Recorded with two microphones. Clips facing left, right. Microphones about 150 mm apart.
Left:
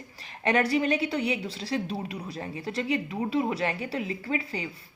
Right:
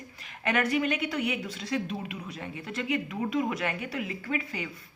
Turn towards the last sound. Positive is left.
turn(degrees=30)  # may be behind; listen again after turning